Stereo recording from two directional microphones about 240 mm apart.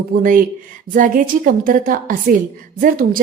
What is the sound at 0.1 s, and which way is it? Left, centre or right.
A woman's voice, right.